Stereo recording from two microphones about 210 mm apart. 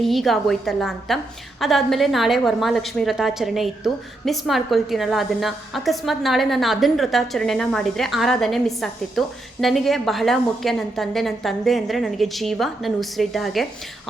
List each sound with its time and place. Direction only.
0.0 s a woman's voice: centre (ahead or behind)